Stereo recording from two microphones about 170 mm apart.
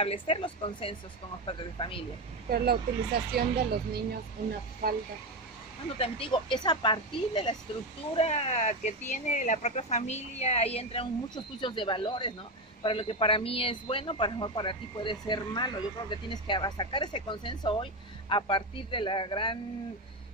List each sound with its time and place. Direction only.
0.0 s a woman's voice: 35° left (ahead or behind)
2.5 s speech: 65° right (ahead or behind)
5.9 s a woman's voice: 30° left (ahead or behind)